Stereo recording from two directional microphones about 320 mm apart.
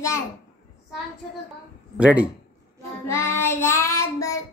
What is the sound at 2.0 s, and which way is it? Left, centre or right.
Speech, centre.